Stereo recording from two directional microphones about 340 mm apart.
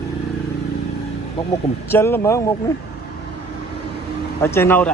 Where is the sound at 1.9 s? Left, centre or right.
Centre.